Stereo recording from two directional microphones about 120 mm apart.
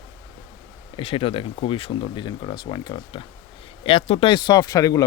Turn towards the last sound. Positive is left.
turn(degrees=30)  # may be behind; listen again after turning